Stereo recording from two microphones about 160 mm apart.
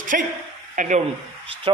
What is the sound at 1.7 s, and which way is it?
Speech, 35° right (ahead or behind).